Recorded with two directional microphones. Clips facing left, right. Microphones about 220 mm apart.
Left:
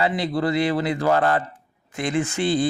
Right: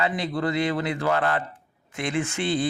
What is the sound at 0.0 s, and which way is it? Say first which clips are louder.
Speech: left 3 dB; 35° left (ahead or behind).